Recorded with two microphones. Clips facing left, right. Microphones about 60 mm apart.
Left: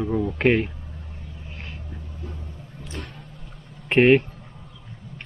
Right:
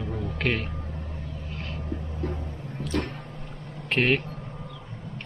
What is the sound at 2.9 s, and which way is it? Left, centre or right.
Vehicle, right.